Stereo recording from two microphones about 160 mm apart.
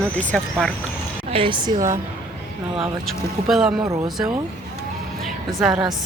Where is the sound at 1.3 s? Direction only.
35° right (ahead or behind).